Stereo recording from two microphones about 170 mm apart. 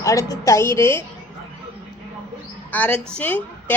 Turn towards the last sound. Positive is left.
turn(degrees=10)  # may be behind; listen again after turning